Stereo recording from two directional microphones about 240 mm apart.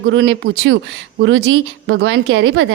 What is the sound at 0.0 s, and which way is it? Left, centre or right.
A woman's voice, right.